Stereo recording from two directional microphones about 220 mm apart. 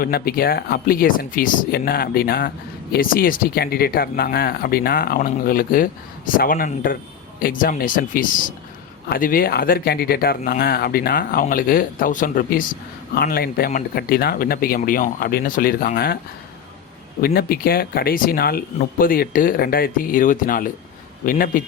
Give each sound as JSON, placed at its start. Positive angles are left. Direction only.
{"t": 0.0, "sound": "speech", "side_deg": 45}
{"t": 17.2, "sound": "speech", "side_deg": 45}